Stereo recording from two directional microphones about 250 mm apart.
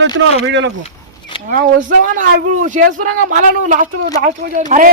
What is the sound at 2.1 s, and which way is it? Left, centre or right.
A woman's voice, right.